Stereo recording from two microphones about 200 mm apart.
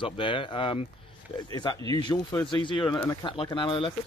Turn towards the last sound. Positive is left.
turn(degrees=25)  # may be behind; listen again after turning